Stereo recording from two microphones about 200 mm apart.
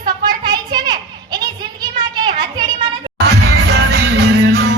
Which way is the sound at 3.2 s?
55° right (ahead or behind).